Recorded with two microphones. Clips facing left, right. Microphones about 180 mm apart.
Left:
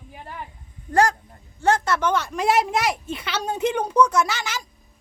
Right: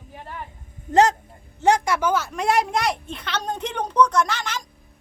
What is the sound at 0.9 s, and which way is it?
A woman's voice, 20° right (ahead or behind).